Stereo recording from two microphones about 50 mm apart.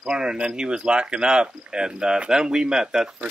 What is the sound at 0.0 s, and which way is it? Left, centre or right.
Speech, centre.